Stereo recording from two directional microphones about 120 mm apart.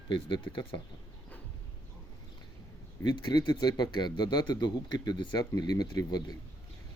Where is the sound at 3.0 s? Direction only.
35° left (ahead or behind).